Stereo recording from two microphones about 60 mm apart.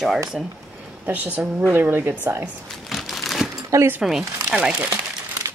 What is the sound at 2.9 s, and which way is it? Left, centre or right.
Crumpling, centre.